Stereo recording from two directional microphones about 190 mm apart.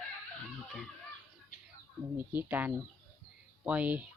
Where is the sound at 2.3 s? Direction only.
10° right (ahead or behind).